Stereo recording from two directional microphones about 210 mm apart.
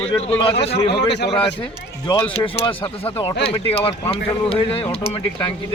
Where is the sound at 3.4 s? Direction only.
25° left (ahead or behind).